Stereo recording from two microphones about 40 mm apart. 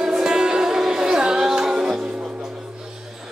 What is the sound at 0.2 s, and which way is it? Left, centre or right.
Music, centre.